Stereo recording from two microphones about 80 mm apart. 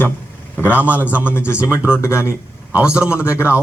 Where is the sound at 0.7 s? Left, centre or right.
Centre.